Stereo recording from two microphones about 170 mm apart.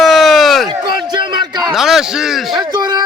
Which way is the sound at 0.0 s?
Centre (ahead or behind).